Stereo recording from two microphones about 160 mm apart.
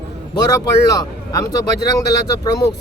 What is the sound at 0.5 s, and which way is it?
A man's voice, 20° left (ahead or behind).